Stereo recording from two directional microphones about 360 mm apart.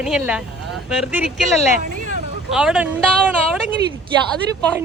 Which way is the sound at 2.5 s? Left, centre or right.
Centre.